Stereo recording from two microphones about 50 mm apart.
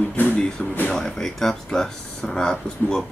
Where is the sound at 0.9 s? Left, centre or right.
Centre.